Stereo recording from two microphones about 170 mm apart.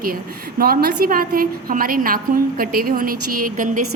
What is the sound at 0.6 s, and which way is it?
A woman's voice, 65° right (ahead or behind).